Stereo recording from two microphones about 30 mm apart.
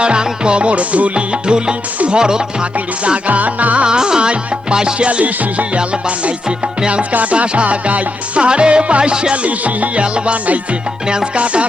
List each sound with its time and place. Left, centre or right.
0.0 s music: right
1.1 s music: right
3.2 s music: right
3.8 s music: right
4.9 s music: right
5.2 s music: right
5.7 s music: right
7.1 s music: right
7.3 s music: right
8.4 s music: right
9.3 s music: right
10.0 s music: right
11.3 s music: right